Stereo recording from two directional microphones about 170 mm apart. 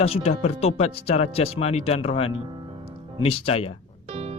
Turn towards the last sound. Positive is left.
turn(degrees=35)  # may be behind; listen again after turning